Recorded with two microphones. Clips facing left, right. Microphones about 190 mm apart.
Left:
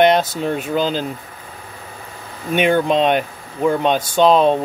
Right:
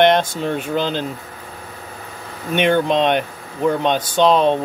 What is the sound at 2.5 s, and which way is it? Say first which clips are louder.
Speech: left 1 dB; 10° left (ahead or behind).